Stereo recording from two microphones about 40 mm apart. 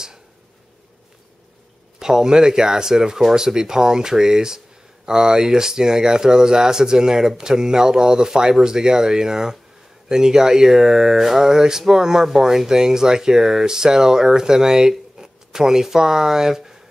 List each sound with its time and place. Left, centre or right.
2.0 s speech: centre